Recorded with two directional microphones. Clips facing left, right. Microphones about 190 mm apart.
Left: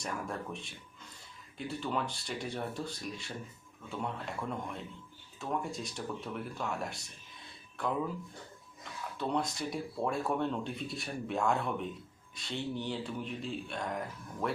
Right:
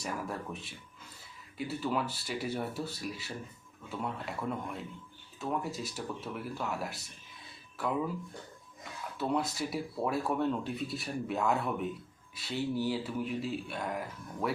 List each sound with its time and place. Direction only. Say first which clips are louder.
0.0 s speech: right 1 dB; 5° right (ahead or behind)